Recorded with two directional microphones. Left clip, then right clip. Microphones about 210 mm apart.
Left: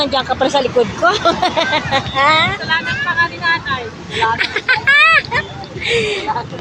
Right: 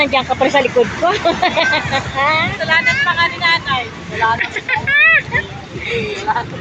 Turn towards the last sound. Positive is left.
turn(degrees=0)  # may be behind; listen again after turning